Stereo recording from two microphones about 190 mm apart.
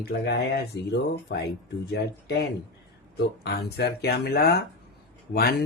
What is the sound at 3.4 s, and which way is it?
Speech, 60° left (ahead or behind).